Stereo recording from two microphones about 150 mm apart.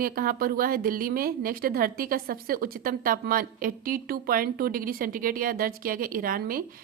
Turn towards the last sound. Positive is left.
turn(degrees=-70)  # may be behind; listen again after turning